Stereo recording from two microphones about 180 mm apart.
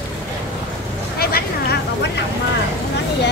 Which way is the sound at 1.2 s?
60° left (ahead or behind).